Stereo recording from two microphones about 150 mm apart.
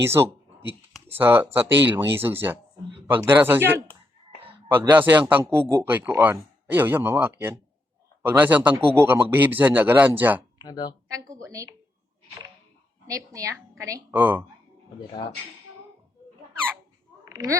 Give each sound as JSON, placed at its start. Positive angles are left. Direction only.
{"t": 0.0, "sound": "a man's voice", "side_deg": -15}
{"t": 10.6, "sound": "speech", "side_deg": 25}
{"t": 11.4, "sound": "a woman's voice", "side_deg": -20}
{"t": 13.1, "sound": "a woman's voice", "side_deg": -25}
{"t": 17.2, "sound": "a sound", "side_deg": -25}